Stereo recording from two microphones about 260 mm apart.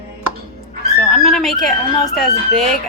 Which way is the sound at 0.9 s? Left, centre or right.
Centre.